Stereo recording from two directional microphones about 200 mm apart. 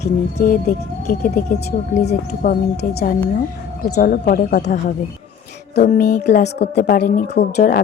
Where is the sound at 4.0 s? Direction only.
45° left (ahead or behind).